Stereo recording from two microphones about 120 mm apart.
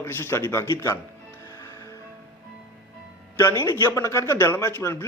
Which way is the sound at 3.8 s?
25° left (ahead or behind).